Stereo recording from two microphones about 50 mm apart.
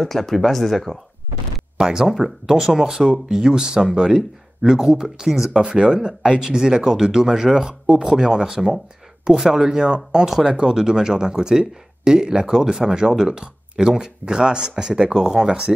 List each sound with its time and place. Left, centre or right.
0.0 s speech: centre
1.8 s speech: centre
5.6 s speech: centre